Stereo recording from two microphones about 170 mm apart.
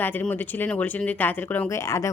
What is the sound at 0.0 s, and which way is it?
Speech, 10° left (ahead or behind).